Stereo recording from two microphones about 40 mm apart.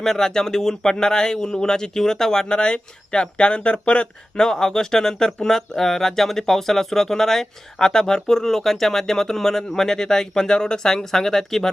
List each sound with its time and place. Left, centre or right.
0.0 s speech: centre; by 4.1 s left
4.4 s speech: centre